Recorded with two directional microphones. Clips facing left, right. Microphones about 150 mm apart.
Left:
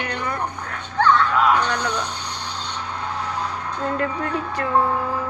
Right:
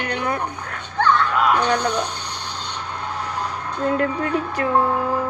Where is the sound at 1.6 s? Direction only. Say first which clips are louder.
Right 4 dB; 55° right (ahead or behind).